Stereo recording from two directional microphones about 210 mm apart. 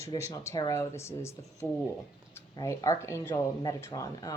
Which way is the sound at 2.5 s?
15° left (ahead or behind).